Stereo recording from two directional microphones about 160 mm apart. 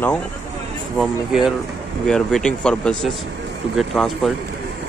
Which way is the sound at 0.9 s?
Centre (ahead or behind).